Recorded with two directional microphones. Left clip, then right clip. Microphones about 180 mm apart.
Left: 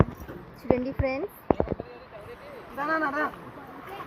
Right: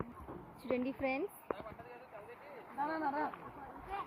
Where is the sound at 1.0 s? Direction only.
10° right (ahead or behind).